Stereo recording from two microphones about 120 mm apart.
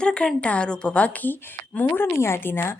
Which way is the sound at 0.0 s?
5° left (ahead or behind).